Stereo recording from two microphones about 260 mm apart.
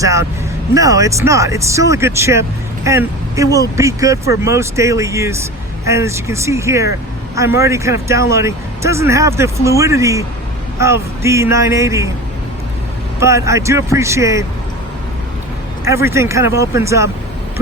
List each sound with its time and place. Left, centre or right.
0.0 s speech: centre
13.1 s speech: centre
15.8 s speech: centre